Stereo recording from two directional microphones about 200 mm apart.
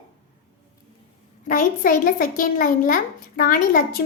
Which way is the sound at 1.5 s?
45° left (ahead or behind).